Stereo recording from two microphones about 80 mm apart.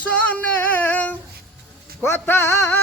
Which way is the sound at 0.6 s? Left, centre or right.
Left.